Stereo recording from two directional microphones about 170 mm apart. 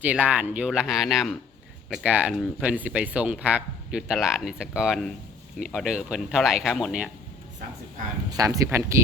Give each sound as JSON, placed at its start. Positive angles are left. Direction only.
{"t": 0.0, "sound": "speech", "side_deg": -5}
{"t": 8.4, "sound": "speech", "side_deg": -20}